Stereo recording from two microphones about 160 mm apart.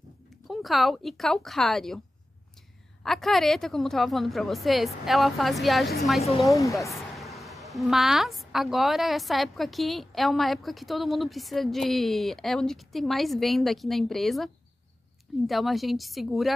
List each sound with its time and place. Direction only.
0.5 s a woman's voice: centre (ahead or behind)
3.0 s a woman's voice: centre (ahead or behind)
6.5 s speech: 20° left (ahead or behind)
7.2 s a woman's voice: centre (ahead or behind)